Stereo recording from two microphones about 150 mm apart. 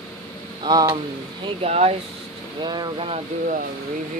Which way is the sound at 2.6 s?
30° right (ahead or behind).